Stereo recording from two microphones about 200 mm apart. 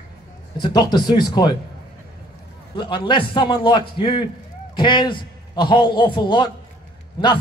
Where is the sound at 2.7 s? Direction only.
25° left (ahead or behind).